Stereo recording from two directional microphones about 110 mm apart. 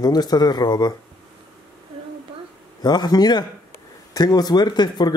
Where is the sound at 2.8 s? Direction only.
40° left (ahead or behind).